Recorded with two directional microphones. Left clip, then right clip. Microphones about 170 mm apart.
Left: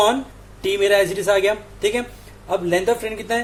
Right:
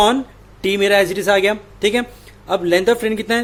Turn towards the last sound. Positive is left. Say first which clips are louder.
# right 4 dB
turn(degrees=-50)  # may be behind; listen again after turning